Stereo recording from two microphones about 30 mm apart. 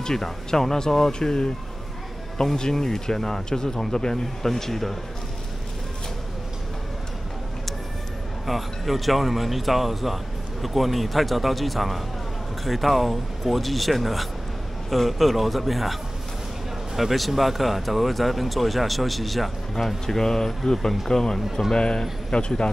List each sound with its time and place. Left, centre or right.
0.0 s speech: centre
2.5 s speech: left
8.5 s speech: centre
20.1 s speech: centre
21.7 s speech: left